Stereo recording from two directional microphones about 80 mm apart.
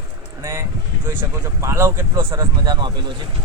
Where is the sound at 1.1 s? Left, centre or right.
Right.